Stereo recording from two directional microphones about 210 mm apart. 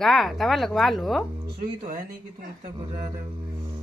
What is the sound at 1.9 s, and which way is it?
Speech, 40° right (ahead or behind).